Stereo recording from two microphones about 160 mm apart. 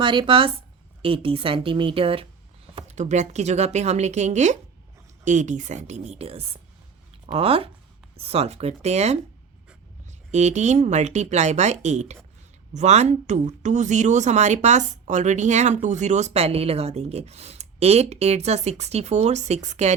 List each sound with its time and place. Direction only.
0.0 s speech: 30° right (ahead or behind)
10.3 s speech: 45° right (ahead or behind)